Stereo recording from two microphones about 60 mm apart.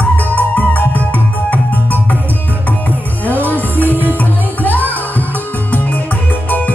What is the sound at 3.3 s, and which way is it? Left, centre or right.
Music, left.